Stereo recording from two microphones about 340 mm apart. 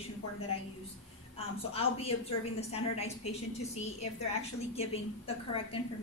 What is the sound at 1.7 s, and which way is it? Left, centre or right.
A woman's voice, centre.